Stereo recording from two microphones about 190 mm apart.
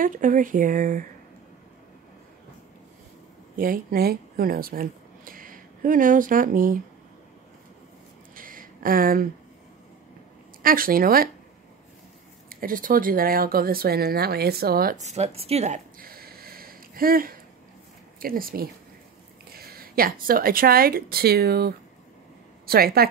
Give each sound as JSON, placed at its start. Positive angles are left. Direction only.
{"t": 0.0, "sound": "speech", "side_deg": -45}
{"t": 3.5, "sound": "speech", "side_deg": -50}
{"t": 8.4, "sound": "a sound", "side_deg": -45}
{"t": 10.6, "sound": "speech", "side_deg": -50}
{"t": 12.4, "sound": "a woman's voice", "side_deg": -50}